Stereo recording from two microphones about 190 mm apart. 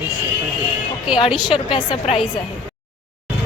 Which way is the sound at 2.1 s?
35° left (ahead or behind).